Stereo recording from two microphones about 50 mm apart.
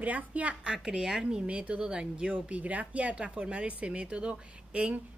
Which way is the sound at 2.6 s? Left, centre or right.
Right.